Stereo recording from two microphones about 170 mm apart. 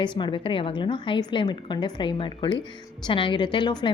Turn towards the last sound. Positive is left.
turn(degrees=25)  # may be behind; listen again after turning